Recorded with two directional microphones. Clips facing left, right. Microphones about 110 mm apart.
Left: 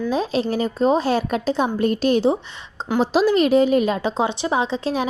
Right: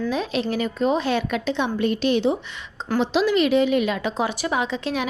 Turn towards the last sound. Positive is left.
turn(degrees=35)  # may be behind; listen again after turning